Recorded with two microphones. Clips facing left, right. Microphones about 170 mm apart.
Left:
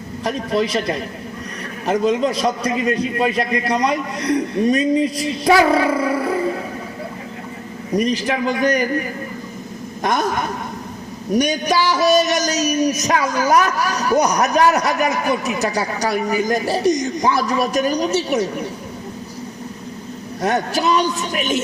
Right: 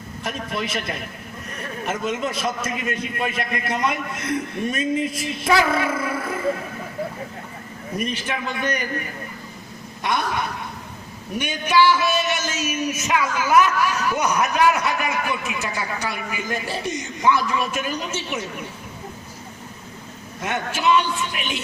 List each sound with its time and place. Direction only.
0.3 s a man's voice: 35° left (ahead or behind)
7.9 s a man's voice: 35° left (ahead or behind)
10.0 s a woman's voice: 45° left (ahead or behind)
20.4 s a man's voice: 40° left (ahead or behind)